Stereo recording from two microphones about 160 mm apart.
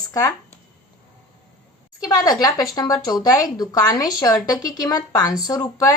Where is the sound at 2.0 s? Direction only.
25° left (ahead or behind).